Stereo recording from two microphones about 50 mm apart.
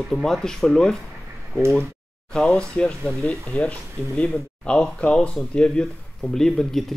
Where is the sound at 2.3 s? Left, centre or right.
Centre.